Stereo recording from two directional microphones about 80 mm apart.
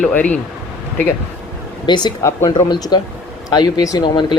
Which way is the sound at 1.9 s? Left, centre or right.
Left.